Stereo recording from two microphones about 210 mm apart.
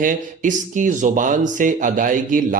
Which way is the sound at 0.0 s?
40° right (ahead or behind).